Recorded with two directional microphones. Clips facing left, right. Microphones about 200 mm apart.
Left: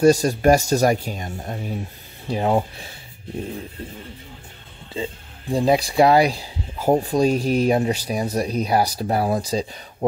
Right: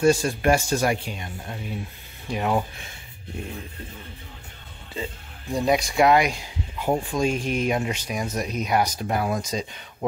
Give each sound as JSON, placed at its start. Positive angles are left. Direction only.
{"t": 0.0, "sound": "speech", "side_deg": 40}
{"t": 4.9, "sound": "speech", "side_deg": 30}